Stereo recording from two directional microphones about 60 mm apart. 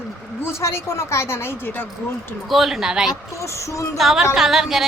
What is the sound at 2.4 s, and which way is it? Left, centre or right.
Speech, centre.